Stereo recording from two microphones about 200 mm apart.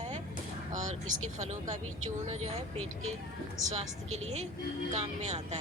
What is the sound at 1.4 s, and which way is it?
Speech, 35° right (ahead or behind).